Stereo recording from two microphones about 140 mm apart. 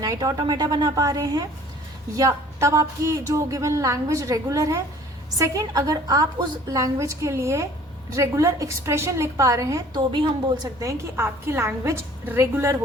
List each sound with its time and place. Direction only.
0.0 s a woman's voice: 25° right (ahead or behind)
10.1 s a woman's voice: 35° right (ahead or behind)
10.8 s a woman's voice: 20° right (ahead or behind)